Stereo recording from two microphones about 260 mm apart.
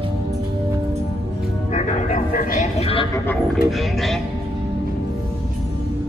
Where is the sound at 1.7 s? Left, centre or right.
Left.